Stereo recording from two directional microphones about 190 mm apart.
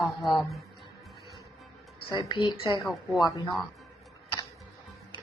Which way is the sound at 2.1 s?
25° left (ahead or behind).